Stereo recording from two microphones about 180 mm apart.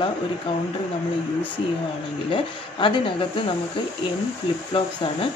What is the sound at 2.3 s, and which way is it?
A woman's voice, 30° left (ahead or behind).